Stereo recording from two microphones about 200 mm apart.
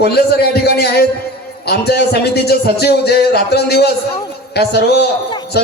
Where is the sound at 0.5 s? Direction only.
55° left (ahead or behind).